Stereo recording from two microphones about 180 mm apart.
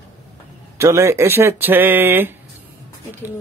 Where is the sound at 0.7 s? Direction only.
15° right (ahead or behind).